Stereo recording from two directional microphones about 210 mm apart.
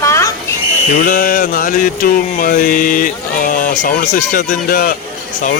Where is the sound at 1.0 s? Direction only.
40° left (ahead or behind).